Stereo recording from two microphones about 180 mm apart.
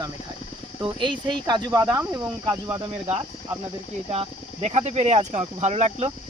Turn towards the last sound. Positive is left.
turn(degrees=-40)  # may be behind; listen again after turning